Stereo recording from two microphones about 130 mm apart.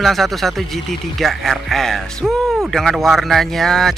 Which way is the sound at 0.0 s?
Centre (ahead or behind).